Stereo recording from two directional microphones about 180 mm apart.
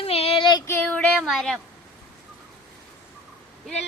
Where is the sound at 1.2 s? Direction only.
Centre (ahead or behind).